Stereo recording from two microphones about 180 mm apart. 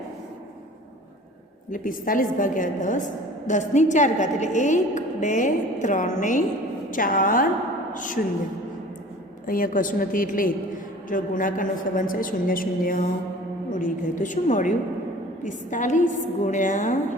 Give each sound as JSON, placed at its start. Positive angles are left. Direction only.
{"t": 1.7, "sound": "a woman's voice", "side_deg": 50}
{"t": 9.5, "sound": "a woman's voice", "side_deg": 50}